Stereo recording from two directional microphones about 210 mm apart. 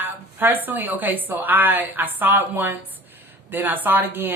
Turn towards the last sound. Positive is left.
turn(degrees=-10)  # may be behind; listen again after turning